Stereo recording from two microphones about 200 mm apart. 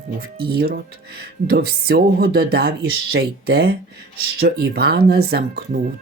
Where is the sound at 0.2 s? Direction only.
50° right (ahead or behind).